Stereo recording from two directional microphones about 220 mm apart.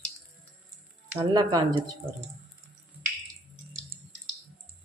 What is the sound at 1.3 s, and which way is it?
Speech, 20° right (ahead or behind).